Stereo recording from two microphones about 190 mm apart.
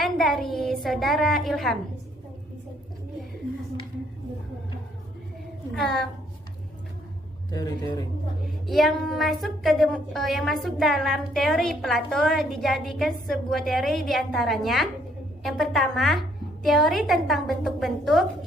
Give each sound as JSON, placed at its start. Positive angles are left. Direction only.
{"t": 0.0, "sound": "a woman's voice", "side_deg": 0}
{"t": 5.7, "sound": "a woman's voice", "side_deg": 0}
{"t": 7.5, "sound": "a man's voice", "side_deg": 20}
{"t": 8.6, "sound": "a woman's voice", "side_deg": 0}